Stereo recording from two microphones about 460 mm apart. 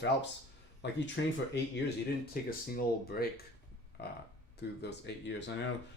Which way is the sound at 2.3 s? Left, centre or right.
Centre.